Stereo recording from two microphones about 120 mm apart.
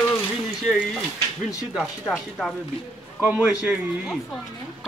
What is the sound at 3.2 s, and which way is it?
Speech, 15° right (ahead or behind).